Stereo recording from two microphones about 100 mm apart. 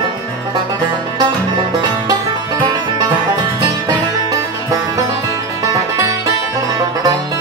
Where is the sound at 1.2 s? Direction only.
45° right (ahead or behind).